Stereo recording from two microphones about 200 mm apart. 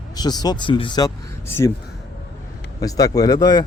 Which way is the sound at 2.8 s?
20° left (ahead or behind).